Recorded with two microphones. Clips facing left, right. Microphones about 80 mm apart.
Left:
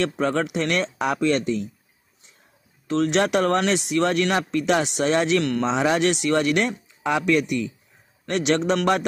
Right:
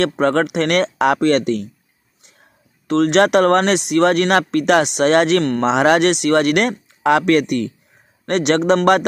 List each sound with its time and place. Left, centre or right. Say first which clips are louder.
0.2 s speech: right 6 dB; right
2.9 s speech: right 7 dB; right
7.0 s speech: right 7 dB; right